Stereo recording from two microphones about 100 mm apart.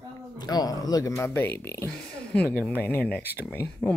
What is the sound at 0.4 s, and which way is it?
Speech, 40° left (ahead or behind).